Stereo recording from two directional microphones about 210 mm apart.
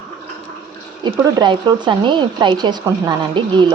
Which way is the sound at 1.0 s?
20° right (ahead or behind).